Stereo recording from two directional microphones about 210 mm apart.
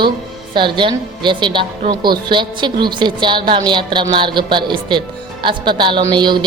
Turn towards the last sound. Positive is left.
turn(degrees=-20)  # may be behind; listen again after turning